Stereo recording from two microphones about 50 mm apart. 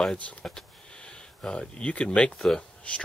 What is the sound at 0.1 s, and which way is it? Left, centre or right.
Speech, left.